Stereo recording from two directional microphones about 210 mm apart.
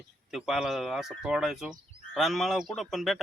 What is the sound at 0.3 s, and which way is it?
Speech, centre (ahead or behind).